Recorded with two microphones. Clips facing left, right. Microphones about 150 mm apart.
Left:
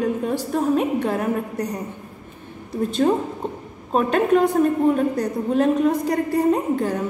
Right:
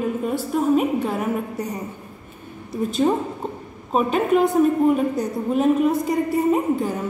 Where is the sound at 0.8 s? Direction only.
5° right (ahead or behind).